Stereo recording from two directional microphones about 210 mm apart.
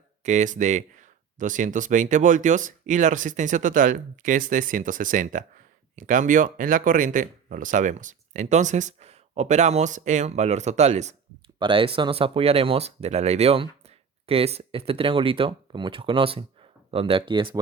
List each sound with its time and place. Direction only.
0.2 s speech: 35° right (ahead or behind)